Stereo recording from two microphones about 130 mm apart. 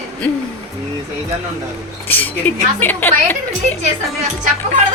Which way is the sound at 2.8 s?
15° left (ahead or behind).